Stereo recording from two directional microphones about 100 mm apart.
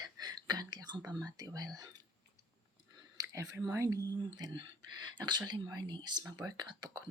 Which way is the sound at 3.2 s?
35° right (ahead or behind).